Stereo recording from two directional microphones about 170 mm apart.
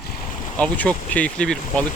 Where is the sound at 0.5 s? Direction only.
10° left (ahead or behind).